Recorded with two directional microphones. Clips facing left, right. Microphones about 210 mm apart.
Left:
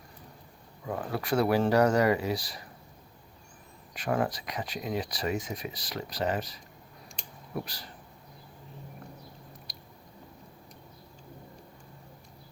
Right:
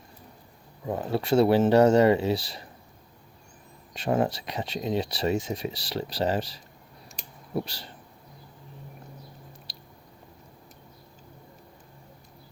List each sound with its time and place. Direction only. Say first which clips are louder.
0.9 s speech: right 5 dB; 25° right (ahead or behind)
3.9 s speech: right 4 dB; 25° right (ahead or behind)
9.7 s squish: right 1 dB; 30° right (ahead or behind)